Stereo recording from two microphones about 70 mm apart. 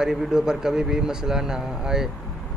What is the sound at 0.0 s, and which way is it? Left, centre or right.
Speech, centre.